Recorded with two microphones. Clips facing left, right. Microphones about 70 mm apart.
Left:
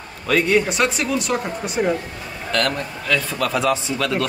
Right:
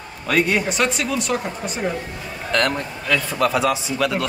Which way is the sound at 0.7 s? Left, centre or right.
Centre.